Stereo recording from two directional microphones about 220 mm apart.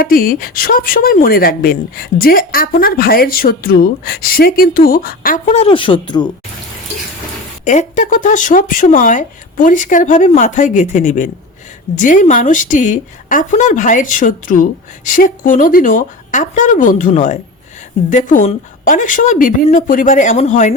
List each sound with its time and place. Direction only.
0.0 s speech: 40° left (ahead or behind); by 6.2 s 20° left (ahead or behind)
7.6 s speech: 35° left (ahead or behind)